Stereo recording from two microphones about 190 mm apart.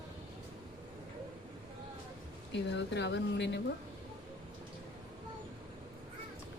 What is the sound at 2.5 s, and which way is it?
Speech, 65° left (ahead or behind).